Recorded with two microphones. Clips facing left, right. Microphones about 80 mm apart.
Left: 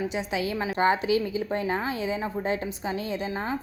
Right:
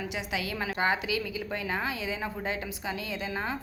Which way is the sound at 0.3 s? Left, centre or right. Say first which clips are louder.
Left 4 dB; left.